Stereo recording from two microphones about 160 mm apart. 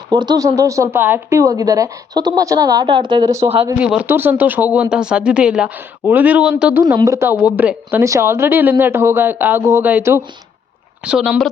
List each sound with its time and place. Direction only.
0.1 s speech: 25° right (ahead or behind)
3.8 s a woman's voice: 5° right (ahead or behind)
6.8 s a woman's voice: 20° right (ahead or behind)